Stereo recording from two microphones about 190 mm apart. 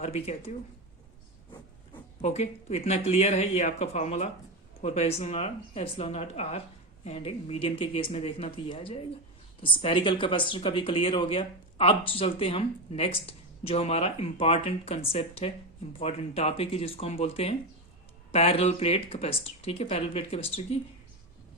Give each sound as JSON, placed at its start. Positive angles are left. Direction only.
{"t": 0.0, "sound": "speech", "side_deg": 35}
{"t": 1.9, "sound": "speech", "side_deg": 35}